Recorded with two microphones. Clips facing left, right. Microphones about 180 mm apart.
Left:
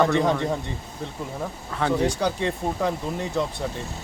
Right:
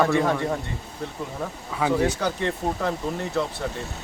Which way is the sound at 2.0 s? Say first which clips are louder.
Even; 15° left (ahead or behind).